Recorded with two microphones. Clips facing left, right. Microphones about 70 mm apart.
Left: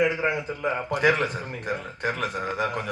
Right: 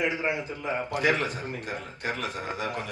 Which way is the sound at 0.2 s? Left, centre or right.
Left.